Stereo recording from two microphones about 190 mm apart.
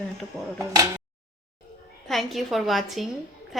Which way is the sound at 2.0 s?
Centre (ahead or behind).